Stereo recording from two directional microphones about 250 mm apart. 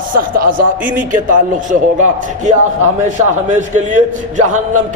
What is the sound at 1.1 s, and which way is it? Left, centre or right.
Speech, right.